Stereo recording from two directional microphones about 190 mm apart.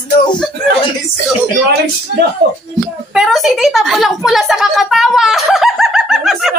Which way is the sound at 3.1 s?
Centre (ahead or behind).